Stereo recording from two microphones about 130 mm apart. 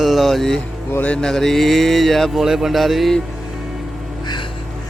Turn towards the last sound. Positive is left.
turn(degrees=0)  # may be behind; listen again after turning